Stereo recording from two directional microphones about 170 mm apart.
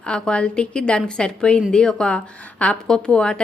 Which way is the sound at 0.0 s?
5° left (ahead or behind).